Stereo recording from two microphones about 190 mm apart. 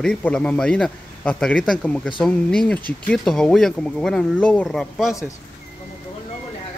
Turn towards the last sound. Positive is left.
turn(degrees=0)  # may be behind; listen again after turning